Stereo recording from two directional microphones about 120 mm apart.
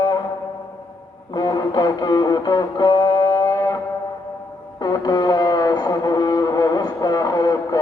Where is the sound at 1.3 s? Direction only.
35° left (ahead or behind).